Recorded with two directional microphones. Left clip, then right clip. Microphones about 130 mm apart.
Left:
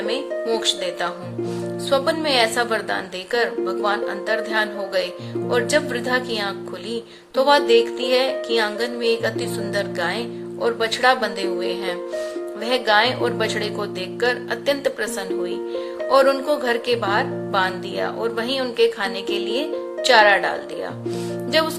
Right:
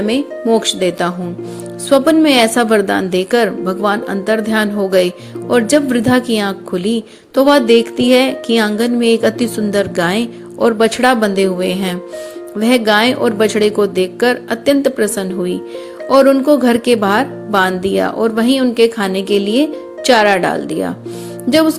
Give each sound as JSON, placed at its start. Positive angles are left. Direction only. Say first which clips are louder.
{"t": 0.6, "sound": "speech", "louder": "right 7 dB", "side_deg": -35}